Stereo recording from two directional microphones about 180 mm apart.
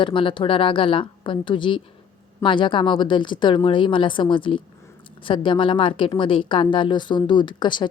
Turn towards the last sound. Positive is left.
turn(degrees=25)  # may be behind; listen again after turning